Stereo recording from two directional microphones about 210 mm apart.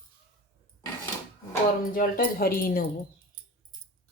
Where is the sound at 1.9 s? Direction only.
40° left (ahead or behind).